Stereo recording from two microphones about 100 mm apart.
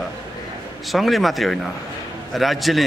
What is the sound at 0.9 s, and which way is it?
Speech, centre (ahead or behind).